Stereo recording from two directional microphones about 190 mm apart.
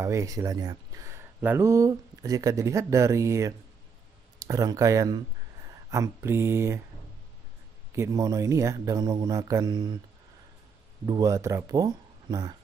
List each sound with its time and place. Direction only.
0.0 s speech: 15° right (ahead or behind)
7.9 s speech: 15° right (ahead or behind)
11.1 s speech: 20° right (ahead or behind)